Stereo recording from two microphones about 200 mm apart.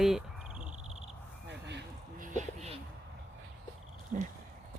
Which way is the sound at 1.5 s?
60° right (ahead or behind).